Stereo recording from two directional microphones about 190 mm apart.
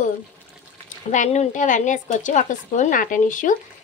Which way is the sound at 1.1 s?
40° left (ahead or behind).